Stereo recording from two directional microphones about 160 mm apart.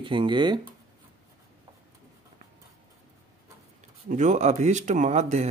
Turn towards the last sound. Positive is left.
turn(degrees=-45)  # may be behind; listen again after turning